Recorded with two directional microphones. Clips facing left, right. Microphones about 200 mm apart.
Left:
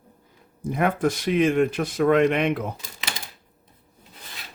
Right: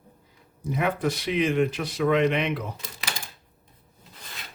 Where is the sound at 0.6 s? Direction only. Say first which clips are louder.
Left 3 dB; 50° left (ahead or behind).